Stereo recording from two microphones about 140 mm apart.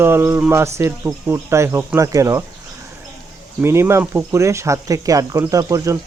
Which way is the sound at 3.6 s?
20° right (ahead or behind).